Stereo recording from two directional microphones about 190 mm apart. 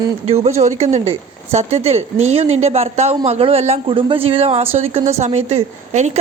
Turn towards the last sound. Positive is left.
turn(degrees=-35)  # may be behind; listen again after turning